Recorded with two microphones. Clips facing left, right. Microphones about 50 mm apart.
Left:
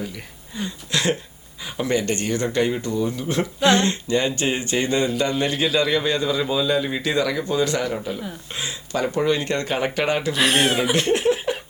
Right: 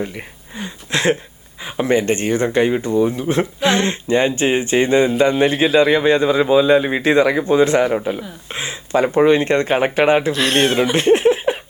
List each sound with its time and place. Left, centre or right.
0.5 s speech: right
10.3 s speech: centre
10.9 s a sound: right